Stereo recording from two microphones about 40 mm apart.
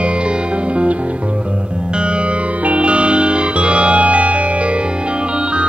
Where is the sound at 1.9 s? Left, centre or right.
Right.